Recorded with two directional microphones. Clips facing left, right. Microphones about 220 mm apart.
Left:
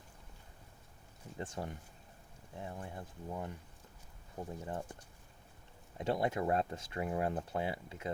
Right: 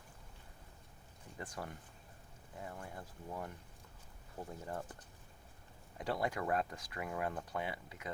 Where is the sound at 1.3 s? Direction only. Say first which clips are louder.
Left 4 dB; 25° left (ahead or behind).